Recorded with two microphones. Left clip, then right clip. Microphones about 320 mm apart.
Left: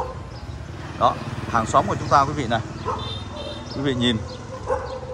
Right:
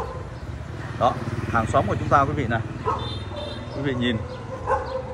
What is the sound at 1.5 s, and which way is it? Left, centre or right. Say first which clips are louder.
Speech: left 3 dB; centre.